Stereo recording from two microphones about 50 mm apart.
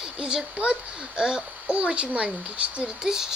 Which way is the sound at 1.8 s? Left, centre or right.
Right.